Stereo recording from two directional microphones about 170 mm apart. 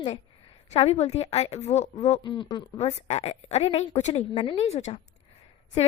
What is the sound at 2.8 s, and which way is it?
A woman's voice, 40° left (ahead or behind).